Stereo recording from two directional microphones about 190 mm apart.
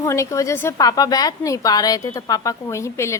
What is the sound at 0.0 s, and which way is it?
Speech, 15° left (ahead or behind).